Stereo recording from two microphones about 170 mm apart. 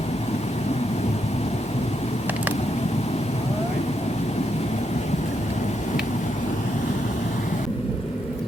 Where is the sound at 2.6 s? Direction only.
40° left (ahead or behind).